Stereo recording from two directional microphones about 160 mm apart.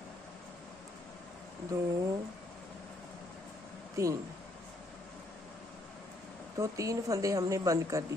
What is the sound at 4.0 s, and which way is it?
Speech, 20° right (ahead or behind).